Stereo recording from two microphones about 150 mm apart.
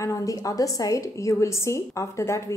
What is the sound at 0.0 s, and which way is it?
A woman's voice, 20° left (ahead or behind).